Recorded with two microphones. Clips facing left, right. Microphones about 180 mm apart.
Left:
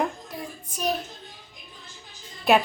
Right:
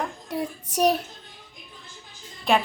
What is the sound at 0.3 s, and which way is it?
Child singing, 70° right (ahead or behind).